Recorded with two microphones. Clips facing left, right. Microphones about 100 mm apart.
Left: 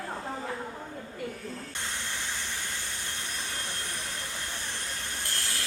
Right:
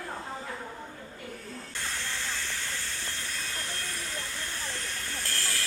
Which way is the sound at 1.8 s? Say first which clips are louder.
Right 3 dB; 20° left (ahead or behind).